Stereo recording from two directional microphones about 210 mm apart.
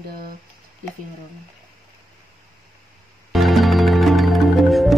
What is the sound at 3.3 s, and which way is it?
Music, centre (ahead or behind).